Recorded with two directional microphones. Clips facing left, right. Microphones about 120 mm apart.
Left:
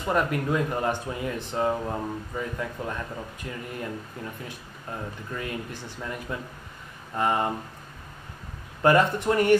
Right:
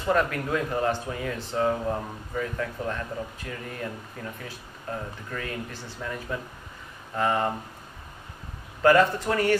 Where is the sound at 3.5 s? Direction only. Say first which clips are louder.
Left 1 dB; 20° left (ahead or behind).